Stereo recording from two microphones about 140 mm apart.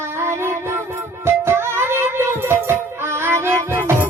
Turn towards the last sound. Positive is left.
turn(degrees=-20)  # may be behind; listen again after turning